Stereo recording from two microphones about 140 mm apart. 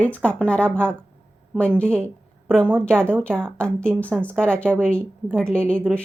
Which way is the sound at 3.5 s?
5° left (ahead or behind).